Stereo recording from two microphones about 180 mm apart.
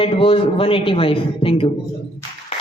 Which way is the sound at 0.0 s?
30° left (ahead or behind).